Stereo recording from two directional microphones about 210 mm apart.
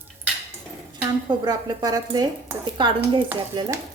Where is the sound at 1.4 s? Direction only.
20° right (ahead or behind).